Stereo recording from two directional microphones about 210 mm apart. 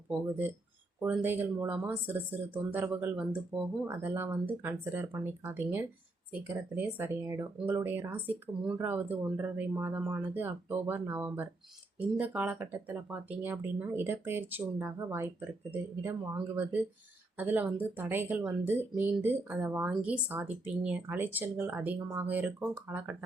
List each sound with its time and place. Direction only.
0.1 s speech: 10° right (ahead or behind)